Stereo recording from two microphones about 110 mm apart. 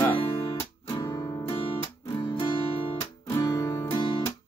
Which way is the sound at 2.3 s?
50° left (ahead or behind).